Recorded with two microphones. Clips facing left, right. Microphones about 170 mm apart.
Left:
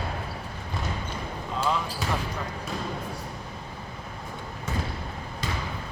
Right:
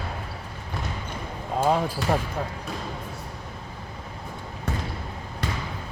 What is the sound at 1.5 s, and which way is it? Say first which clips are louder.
Speech: right 6 dB; 50° right (ahead or behind).